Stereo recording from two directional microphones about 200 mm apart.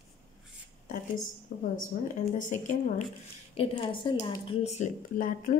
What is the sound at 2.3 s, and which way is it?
Speech, 35° left (ahead or behind).